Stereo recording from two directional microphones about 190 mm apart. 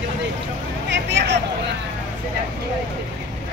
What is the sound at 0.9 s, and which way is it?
Speech, 60° right (ahead or behind).